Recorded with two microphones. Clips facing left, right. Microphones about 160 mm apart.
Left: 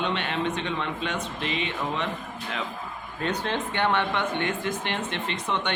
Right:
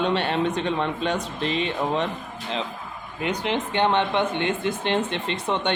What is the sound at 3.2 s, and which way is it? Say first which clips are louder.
Speech: right 3 dB; 15° right (ahead or behind).